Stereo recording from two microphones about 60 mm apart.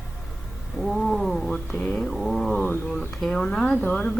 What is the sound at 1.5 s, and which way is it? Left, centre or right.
Speech, centre.